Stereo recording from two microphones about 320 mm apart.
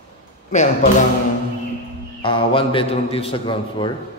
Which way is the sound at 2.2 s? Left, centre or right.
Centre.